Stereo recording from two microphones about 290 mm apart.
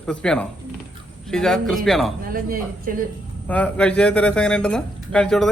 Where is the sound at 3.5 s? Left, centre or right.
Centre.